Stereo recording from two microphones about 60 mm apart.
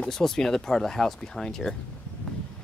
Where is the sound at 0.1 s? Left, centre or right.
Centre.